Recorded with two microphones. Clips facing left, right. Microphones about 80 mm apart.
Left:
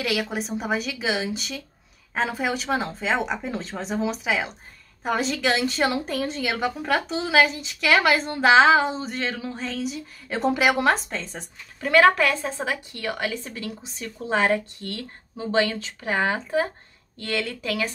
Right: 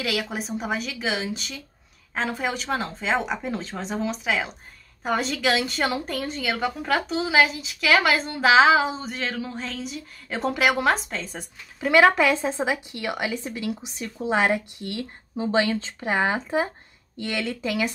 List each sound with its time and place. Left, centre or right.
0.0 s a woman's voice: centre
11.9 s a woman's voice: centre